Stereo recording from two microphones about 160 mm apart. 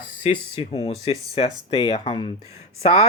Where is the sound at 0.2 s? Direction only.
35° left (ahead or behind).